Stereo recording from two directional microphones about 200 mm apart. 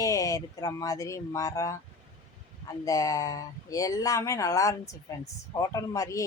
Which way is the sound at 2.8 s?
15° left (ahead or behind).